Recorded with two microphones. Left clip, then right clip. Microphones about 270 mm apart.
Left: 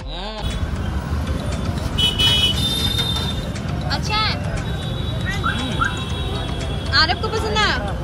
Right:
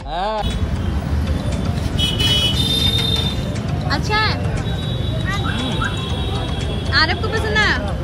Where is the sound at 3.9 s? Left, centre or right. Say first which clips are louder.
Right 2 dB; centre.